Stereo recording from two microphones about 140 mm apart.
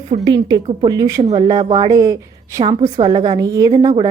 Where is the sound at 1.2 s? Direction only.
45° right (ahead or behind).